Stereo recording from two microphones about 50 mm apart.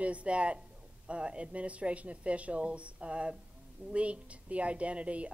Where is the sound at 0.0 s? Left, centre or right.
Right.